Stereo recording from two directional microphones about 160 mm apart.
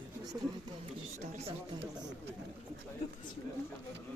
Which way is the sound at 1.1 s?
45° right (ahead or behind).